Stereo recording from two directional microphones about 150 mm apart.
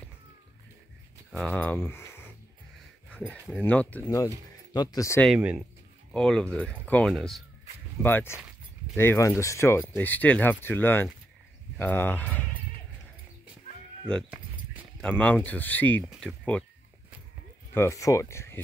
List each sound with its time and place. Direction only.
1.3 s speech: 5° left (ahead or behind)
4.7 s speech: 20° left (ahead or behind)
6.1 s speech: 5° left (ahead or behind)
8.0 s speech: 15° left (ahead or behind)
15.0 s speech: 10° left (ahead or behind)
17.7 s speech: 20° left (ahead or behind)